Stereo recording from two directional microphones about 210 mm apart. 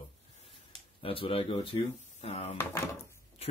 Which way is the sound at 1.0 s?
25° left (ahead or behind).